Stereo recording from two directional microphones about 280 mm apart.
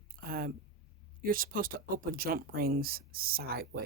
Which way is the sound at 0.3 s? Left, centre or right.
Right.